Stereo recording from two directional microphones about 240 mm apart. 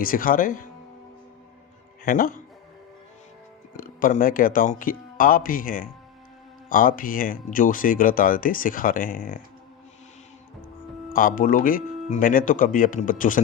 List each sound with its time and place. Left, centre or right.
0.0 s speech: left
2.0 s speech: left
3.8 s speech: left
11.1 s speech: left